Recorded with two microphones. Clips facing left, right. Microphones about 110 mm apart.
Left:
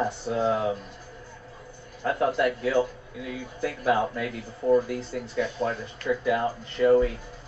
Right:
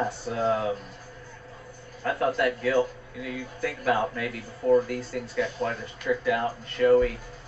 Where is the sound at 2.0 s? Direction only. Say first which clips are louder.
Left 1 dB; 15° left (ahead or behind).